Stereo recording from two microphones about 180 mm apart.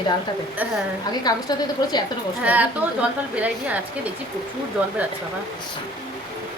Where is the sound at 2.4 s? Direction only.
10° right (ahead or behind).